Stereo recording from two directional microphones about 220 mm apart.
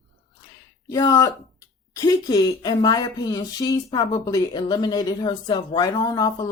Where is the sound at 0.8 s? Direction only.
15° left (ahead or behind).